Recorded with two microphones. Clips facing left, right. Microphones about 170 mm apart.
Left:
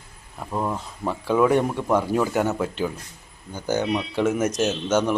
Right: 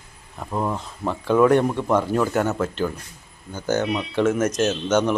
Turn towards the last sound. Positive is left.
turn(degrees=10)  # may be behind; listen again after turning